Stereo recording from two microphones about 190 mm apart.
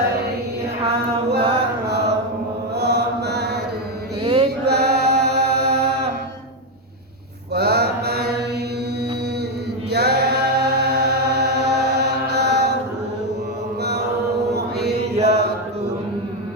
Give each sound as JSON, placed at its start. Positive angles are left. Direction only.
{"t": 1.9, "sound": "mantra", "side_deg": -60}
{"t": 2.7, "sound": "chant", "side_deg": -60}
{"t": 4.2, "sound": "mantra", "side_deg": -30}
{"t": 4.6, "sound": "chant", "side_deg": -60}
{"t": 7.5, "sound": "mantra", "side_deg": -55}
{"t": 9.9, "sound": "singing", "side_deg": -60}
{"t": 14.5, "sound": "mantra", "side_deg": -60}
{"t": 14.9, "sound": "mantra", "side_deg": -35}